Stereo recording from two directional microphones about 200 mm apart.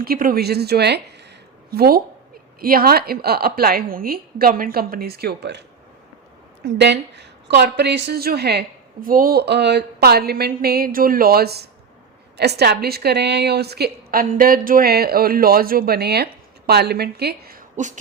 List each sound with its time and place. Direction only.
0.0 s a woman's voice: 45° right (ahead or behind)
6.7 s a woman's voice: 60° right (ahead or behind); by 17.9 s 45° right (ahead or behind)